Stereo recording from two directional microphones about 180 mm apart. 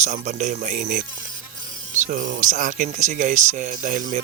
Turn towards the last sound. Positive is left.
turn(degrees=-45)  # may be behind; listen again after turning